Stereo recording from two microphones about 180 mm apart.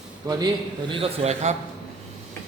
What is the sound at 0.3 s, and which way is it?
A man's voice, 20° right (ahead or behind).